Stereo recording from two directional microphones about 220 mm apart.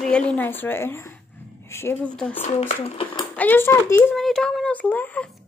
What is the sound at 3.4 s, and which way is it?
Speech, 10° left (ahead or behind).